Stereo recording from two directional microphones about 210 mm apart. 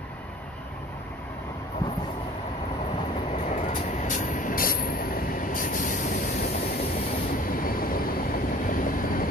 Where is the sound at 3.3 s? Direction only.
35° left (ahead or behind).